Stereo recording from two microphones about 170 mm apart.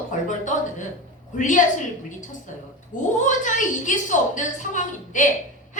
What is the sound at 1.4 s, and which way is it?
Speech, 45° left (ahead or behind).